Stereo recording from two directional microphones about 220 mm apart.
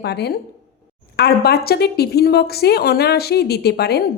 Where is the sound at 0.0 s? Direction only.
50° left (ahead or behind).